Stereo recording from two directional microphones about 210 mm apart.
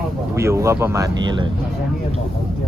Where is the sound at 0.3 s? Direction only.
15° right (ahead or behind).